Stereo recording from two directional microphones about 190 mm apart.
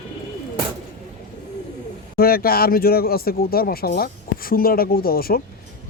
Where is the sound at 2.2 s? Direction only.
50° left (ahead or behind).